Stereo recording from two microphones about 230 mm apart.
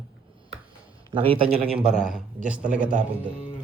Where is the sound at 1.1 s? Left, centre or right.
Right.